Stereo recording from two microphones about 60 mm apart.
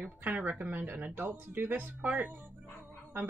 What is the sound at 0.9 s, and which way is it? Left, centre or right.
Speech, right.